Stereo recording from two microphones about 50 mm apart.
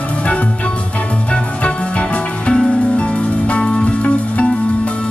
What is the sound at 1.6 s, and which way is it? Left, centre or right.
Music, left.